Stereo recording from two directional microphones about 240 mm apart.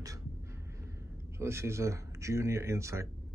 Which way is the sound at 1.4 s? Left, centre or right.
Centre.